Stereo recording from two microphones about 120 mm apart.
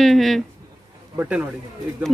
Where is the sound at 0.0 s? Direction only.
Centre (ahead or behind).